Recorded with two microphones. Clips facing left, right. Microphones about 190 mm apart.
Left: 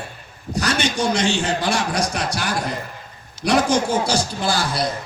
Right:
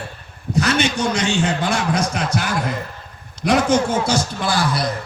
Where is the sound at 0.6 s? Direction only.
35° left (ahead or behind).